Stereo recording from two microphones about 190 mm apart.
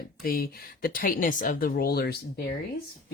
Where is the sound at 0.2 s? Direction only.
50° left (ahead or behind).